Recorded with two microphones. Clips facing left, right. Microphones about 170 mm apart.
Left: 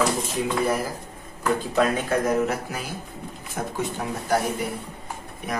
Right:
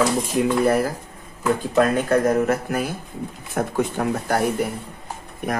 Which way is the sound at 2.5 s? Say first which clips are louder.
Right 7 dB; 55° right (ahead or behind).